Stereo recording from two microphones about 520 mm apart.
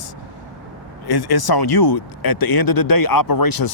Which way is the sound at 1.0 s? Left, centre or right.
Left.